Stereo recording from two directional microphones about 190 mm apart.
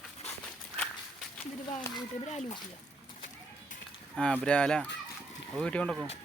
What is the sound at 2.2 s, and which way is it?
Speech, 40° left (ahead or behind).